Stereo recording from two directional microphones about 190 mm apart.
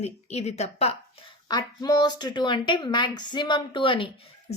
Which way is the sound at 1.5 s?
20° left (ahead or behind).